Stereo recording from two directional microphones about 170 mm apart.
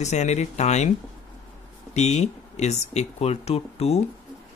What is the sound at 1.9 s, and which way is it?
Speech, 40° left (ahead or behind).